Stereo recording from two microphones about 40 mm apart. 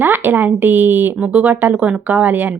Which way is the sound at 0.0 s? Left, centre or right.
Right.